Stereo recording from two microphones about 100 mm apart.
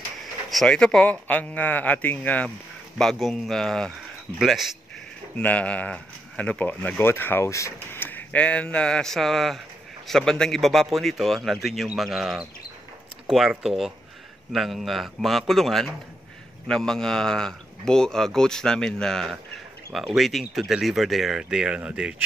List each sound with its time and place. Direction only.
0.5 s speech: 5° left (ahead or behind)
3.0 s a man's voice: centre (ahead or behind)
5.3 s a man's voice: 15° left (ahead or behind)
19.3 s a sound: centre (ahead or behind)
20.2 s a man's voice: centre (ahead or behind)